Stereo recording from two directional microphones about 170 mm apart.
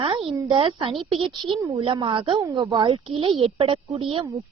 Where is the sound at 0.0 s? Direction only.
35° right (ahead or behind).